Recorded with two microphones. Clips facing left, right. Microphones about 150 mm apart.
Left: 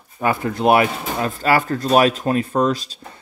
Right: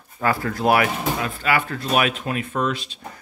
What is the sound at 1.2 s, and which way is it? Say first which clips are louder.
Speech: left 9 dB; 40° left (ahead or behind).